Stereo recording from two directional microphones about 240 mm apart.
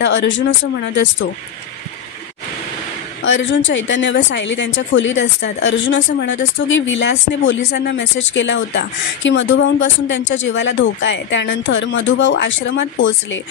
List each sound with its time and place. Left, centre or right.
0.0 s speech: left
3.3 s speech: left